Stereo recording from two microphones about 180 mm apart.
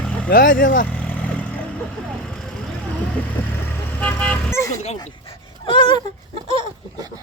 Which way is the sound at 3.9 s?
10° left (ahead or behind).